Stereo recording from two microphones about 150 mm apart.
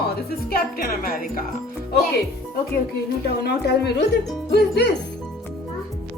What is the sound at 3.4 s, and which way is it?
Speech, 90° left.